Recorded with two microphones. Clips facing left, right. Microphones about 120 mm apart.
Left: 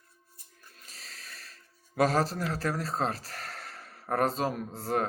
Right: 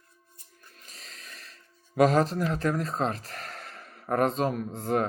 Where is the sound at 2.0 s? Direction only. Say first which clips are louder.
Right 4 dB; 35° left (ahead or behind).